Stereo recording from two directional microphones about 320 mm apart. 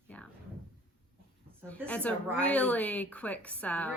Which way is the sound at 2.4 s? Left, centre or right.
Centre.